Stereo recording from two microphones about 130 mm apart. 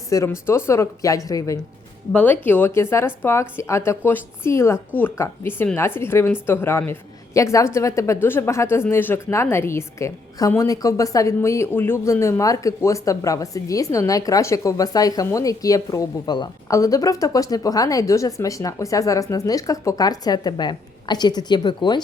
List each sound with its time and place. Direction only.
0.1 s speech: 20° left (ahead or behind)
2.1 s speech: 15° left (ahead or behind); by 22.0 s 35° left (ahead or behind)